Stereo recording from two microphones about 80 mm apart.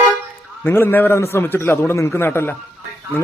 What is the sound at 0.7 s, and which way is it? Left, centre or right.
A man's voice, left.